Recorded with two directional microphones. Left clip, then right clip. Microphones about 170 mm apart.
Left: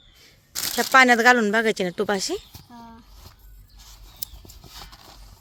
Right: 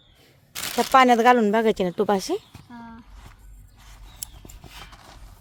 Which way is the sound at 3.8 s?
10° right (ahead or behind).